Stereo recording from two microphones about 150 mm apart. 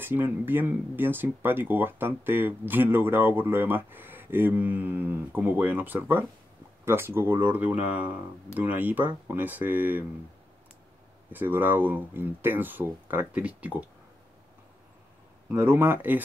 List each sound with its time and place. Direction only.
0.0 s speech: 15° right (ahead or behind)
11.3 s speech: 15° right (ahead or behind)
15.4 s speech: 15° right (ahead or behind)